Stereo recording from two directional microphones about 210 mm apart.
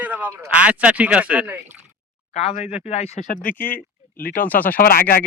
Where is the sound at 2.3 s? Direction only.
30° left (ahead or behind).